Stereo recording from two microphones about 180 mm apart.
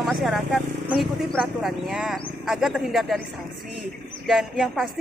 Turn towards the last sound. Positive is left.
turn(degrees=0)  # may be behind; listen again after turning